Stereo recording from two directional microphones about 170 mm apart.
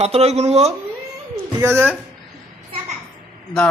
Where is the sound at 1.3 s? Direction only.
15° right (ahead or behind).